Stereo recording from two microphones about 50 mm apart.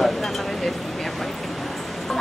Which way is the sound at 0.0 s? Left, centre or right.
Centre.